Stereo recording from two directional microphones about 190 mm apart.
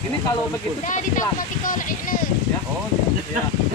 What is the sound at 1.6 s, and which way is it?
Speech, 45° left (ahead or behind).